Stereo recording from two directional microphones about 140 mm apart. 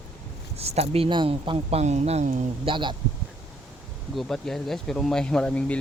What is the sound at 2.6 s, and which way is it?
Speech, 35° right (ahead or behind).